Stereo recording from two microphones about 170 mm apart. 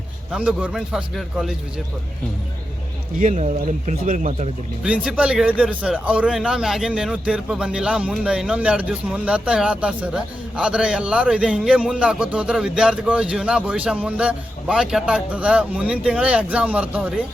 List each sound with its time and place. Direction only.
0.3 s speech: 5° right (ahead or behind)
3.2 s speech: 45° right (ahead or behind)
4.8 s speech: 5° right (ahead or behind)